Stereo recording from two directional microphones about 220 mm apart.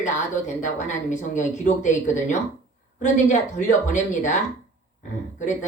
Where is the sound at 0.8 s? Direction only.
35° left (ahead or behind).